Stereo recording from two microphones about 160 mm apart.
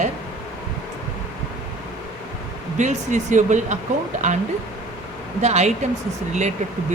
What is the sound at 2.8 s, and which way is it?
Speech, 50° right (ahead or behind).